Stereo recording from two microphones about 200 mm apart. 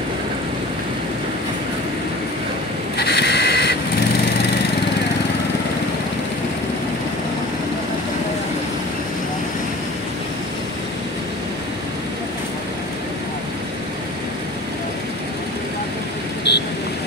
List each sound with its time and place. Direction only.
3.0 s vehicle: 55° left (ahead or behind)
16.5 s vehicle: 55° left (ahead or behind)